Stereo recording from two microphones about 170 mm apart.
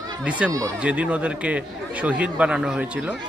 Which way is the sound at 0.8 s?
10° right (ahead or behind).